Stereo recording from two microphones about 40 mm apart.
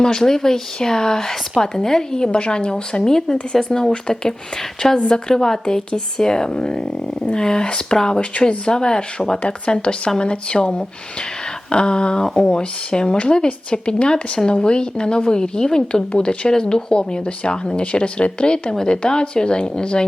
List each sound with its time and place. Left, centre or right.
0.0 s speech: centre
5.3 s speech: centre
9.4 s speech: left